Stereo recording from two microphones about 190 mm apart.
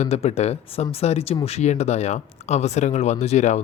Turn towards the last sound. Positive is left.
turn(degrees=35)  # may be behind; listen again after turning